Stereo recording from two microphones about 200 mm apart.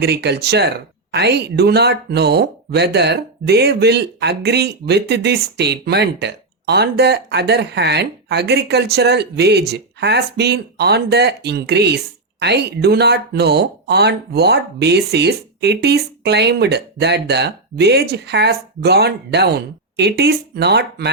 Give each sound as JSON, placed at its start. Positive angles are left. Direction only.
{"t": 0.0, "sound": "speech", "side_deg": -55}